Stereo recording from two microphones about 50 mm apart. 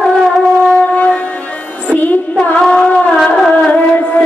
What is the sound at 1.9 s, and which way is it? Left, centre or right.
Music, left.